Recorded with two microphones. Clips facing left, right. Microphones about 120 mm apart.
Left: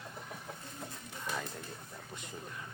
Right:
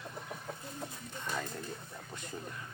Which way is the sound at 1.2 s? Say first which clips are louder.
Right 1 dB; 5° left (ahead or behind).